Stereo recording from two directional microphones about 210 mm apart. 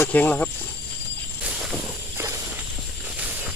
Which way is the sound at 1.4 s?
5° right (ahead or behind).